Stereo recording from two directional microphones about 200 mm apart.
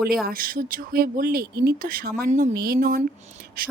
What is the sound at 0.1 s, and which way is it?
Speech, 45° right (ahead or behind).